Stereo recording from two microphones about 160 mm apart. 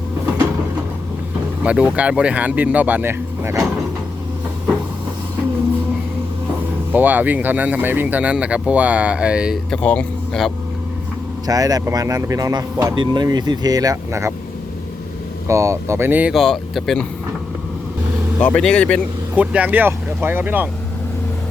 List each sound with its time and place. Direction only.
1.6 s speech: 5° right (ahead or behind)
6.9 s speech: 10° right (ahead or behind)
9.6 s speech: 5° left (ahead or behind)
11.4 s speech: 25° right (ahead or behind)
15.4 s speech: 20° right (ahead or behind)
16.3 s speech: centre (ahead or behind)
18.3 s speech: 10° left (ahead or behind)
19.4 s speech: 10° right (ahead or behind)